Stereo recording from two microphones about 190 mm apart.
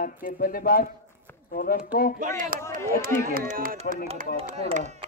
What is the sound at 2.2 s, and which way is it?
Speech, 45° right (ahead or behind).